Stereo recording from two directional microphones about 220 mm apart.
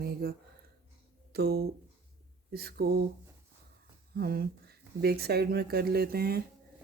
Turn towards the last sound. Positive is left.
turn(degrees=-45)  # may be behind; listen again after turning